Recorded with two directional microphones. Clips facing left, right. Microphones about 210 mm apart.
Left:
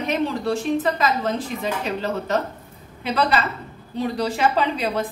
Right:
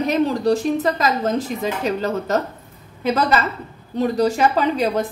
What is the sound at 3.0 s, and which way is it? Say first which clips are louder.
A woman's voice: right 3 dB; 45° right (ahead or behind).